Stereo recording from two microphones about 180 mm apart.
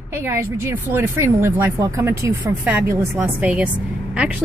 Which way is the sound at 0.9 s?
15° right (ahead or behind).